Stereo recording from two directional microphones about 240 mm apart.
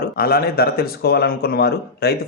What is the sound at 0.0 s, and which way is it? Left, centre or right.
Speech, left.